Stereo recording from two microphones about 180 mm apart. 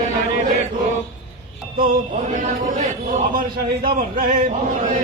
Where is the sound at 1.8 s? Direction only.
50° right (ahead or behind).